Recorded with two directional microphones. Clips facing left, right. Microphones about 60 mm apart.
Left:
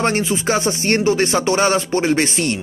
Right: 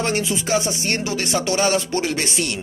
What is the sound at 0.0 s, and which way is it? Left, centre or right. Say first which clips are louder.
Speech: left 4 dB; left.